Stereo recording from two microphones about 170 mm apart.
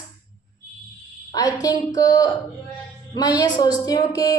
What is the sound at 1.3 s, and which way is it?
A woman's voice, 20° left (ahead or behind).